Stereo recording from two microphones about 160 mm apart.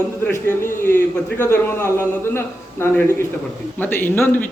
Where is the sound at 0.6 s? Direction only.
15° left (ahead or behind).